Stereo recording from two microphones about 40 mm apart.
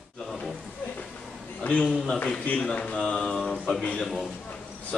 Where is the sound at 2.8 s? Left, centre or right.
Left.